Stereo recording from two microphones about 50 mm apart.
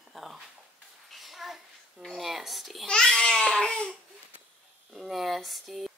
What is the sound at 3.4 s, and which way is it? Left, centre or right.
Crying, centre.